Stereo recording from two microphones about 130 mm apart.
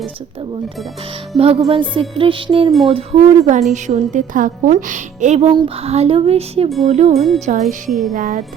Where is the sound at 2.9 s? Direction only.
50° right (ahead or behind).